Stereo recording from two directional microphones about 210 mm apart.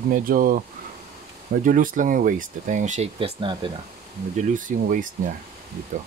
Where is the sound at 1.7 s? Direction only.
40° right (ahead or behind).